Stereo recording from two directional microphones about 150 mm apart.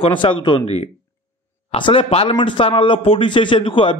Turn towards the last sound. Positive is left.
turn(degrees=35)  # may be behind; listen again after turning